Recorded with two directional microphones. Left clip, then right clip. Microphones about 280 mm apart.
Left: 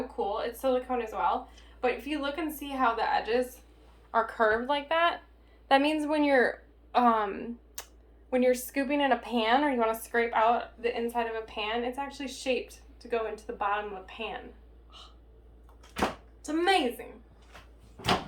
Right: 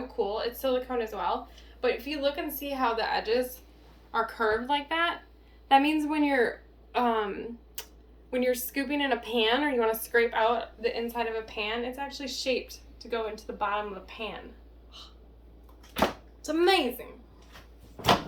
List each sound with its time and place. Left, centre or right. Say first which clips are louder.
0.3 s a woman's voice: left 2 dB; centre
16.4 s a woman's voice: right 2 dB; centre